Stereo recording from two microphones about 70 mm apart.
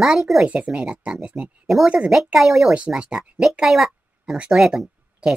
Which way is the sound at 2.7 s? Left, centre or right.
Centre.